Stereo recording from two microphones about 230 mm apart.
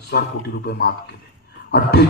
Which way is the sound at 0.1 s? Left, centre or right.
Left.